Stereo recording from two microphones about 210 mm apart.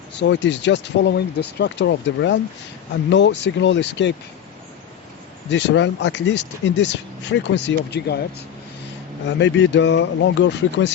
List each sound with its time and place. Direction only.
0.2 s speech: 60° left (ahead or behind)
5.5 s speech: 60° left (ahead or behind)
9.2 s speech: 60° left (ahead or behind)